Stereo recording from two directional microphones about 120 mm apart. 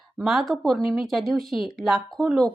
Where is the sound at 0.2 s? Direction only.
Centre (ahead or behind).